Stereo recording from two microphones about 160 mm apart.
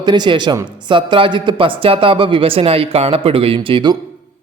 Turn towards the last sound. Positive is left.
turn(degrees=-30)  # may be behind; listen again after turning